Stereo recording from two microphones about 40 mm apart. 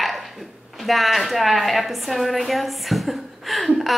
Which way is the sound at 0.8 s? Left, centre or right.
Centre.